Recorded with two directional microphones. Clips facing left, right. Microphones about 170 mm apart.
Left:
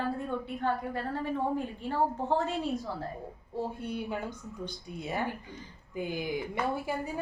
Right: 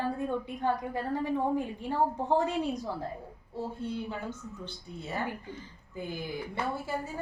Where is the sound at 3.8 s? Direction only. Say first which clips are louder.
Right 1 dB; 15° left (ahead or behind).